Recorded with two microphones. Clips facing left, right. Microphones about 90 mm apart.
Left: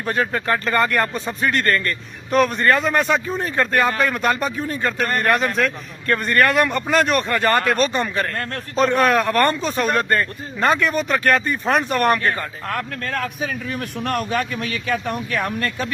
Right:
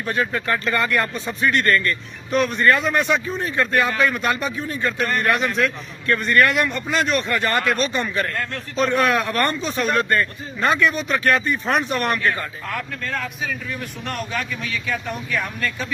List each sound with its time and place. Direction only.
0.0 s speech: 35° left (ahead or behind)
7.3 s speech: 40° left (ahead or behind)
13.7 s speech: 55° left (ahead or behind)